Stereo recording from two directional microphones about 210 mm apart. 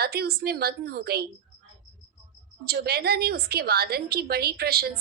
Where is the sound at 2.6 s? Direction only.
50° right (ahead or behind).